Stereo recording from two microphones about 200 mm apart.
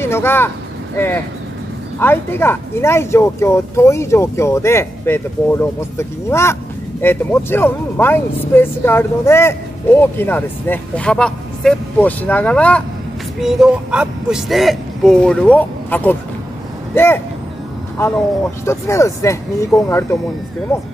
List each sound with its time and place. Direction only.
0.0 s speech: 10° left (ahead or behind)